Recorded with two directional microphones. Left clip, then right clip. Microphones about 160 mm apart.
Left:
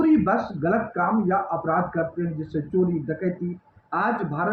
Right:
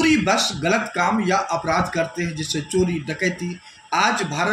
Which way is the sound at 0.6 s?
35° right (ahead or behind).